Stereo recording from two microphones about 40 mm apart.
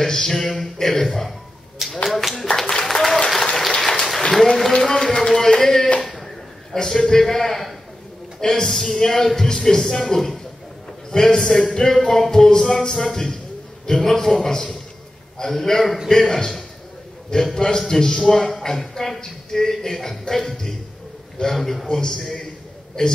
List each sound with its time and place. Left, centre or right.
0.0 s speech: centre
2.0 s clapping: centre
2.7 s applause: centre
3.5 s a sound: centre
4.8 s speech: centre
5.3 s a sound: centre
6.7 s a man's voice: centre
21.9 s speech: centre